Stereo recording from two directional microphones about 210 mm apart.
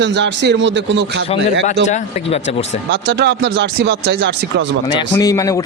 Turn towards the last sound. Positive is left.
turn(degrees=15)  # may be behind; listen again after turning